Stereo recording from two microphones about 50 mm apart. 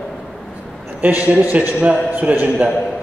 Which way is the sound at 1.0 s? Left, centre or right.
Right.